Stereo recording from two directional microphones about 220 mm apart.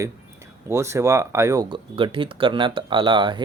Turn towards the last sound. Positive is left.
turn(degrees=-20)  # may be behind; listen again after turning